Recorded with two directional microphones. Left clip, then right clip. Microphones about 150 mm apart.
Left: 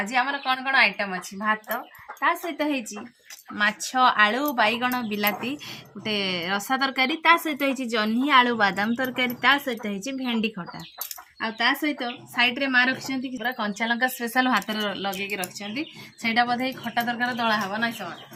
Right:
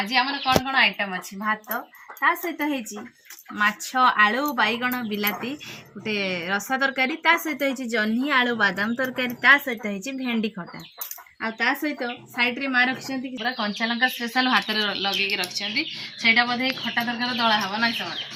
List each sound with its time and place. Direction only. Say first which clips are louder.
0.1 s speech: right 2 dB; 55° left (ahead or behind)
0.9 s speech: right 1 dB; 15° left (ahead or behind)
2.2 s a woman's voice: right 1 dB; 20° left (ahead or behind); by 10.7 s 40° left (ahead or behind)
11.3 s speech: even; 55° left (ahead or behind); by 13.3 s 80° left
13.4 s speech: right 2 dB; 40° left (ahead or behind); by 15.1 s 70° left (ahead or behind)
15.4 s speech: right 6 dB; 90° left; by 17.0 s 60° left (ahead or behind)
17.2 s speech: right 4 dB; 35° left (ahead or behind)